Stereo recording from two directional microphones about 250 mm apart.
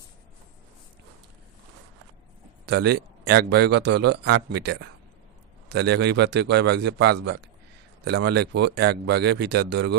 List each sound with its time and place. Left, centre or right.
2.6 s a man's voice: right